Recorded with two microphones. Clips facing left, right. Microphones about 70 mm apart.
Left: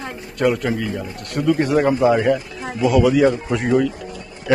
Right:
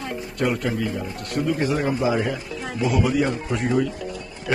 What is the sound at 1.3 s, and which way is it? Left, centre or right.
Speech, left.